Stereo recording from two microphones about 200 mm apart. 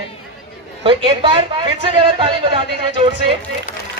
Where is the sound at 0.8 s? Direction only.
30° right (ahead or behind).